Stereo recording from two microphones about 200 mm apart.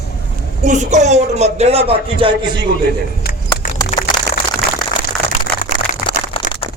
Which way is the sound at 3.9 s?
40° left (ahead or behind).